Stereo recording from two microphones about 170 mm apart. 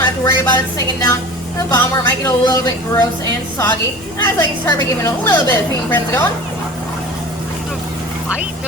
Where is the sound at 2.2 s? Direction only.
20° left (ahead or behind).